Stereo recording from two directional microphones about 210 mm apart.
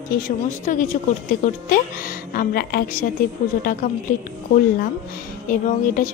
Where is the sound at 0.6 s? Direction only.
40° left (ahead or behind).